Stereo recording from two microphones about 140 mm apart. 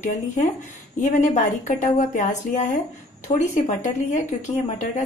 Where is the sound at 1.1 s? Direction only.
60° left (ahead or behind).